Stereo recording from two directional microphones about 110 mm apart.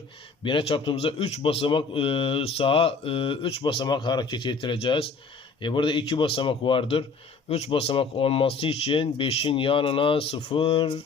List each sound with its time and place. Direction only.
0.4 s a man's voice: 50° left (ahead or behind)
7.4 s a man's voice: 70° left (ahead or behind); by 10.9 s 55° left (ahead or behind)